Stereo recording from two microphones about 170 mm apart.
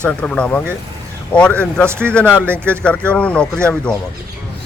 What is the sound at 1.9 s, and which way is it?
Speech, 15° right (ahead or behind).